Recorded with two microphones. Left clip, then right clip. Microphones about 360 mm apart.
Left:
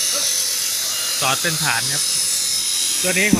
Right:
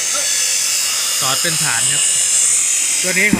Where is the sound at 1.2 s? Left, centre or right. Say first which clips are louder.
Left 1 dB; centre.